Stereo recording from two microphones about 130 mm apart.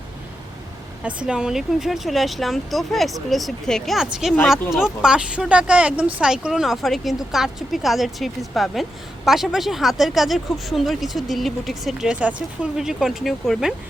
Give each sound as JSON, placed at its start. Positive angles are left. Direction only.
{"t": 1.0, "sound": "speech", "side_deg": -5}